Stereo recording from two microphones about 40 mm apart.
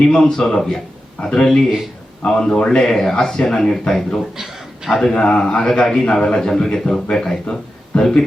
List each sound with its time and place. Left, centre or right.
0.0 s a man's voice: centre
5.1 s a man's voice: left